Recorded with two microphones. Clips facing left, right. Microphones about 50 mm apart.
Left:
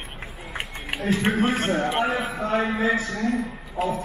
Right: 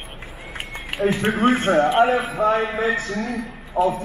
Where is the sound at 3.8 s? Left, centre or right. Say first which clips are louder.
Right 7 dB; right.